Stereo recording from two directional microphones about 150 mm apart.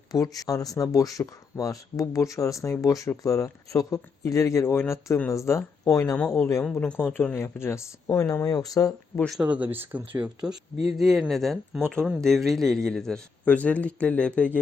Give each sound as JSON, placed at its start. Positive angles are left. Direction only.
{"t": 0.1, "sound": "speech", "side_deg": 25}
{"t": 9.1, "sound": "a man's voice", "side_deg": 5}
{"t": 9.4, "sound": "a man's voice", "side_deg": -10}